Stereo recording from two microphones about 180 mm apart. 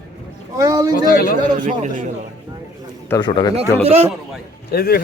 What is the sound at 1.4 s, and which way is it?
Speech, 45° right (ahead or behind).